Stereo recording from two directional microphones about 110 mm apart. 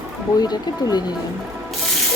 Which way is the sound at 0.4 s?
35° left (ahead or behind).